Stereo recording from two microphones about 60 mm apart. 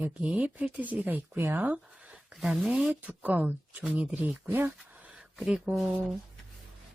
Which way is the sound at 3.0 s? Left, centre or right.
Right.